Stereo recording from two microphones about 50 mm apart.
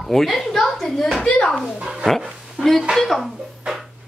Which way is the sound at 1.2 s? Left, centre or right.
Left.